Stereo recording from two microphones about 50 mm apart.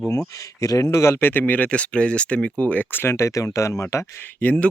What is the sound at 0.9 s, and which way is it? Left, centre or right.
Speech, left.